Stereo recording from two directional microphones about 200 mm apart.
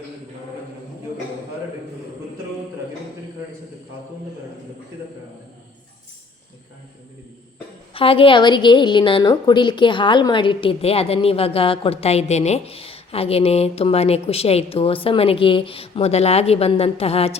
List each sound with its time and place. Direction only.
7.9 s a woman's voice: 25° left (ahead or behind)